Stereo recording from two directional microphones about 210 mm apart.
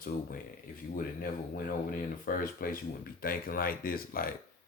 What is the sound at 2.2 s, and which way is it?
Speech, 40° left (ahead or behind).